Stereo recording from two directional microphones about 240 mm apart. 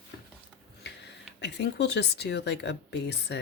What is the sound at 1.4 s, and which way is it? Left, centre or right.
Speech, left.